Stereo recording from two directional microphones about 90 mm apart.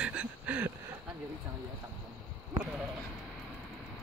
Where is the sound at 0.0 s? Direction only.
15° right (ahead or behind).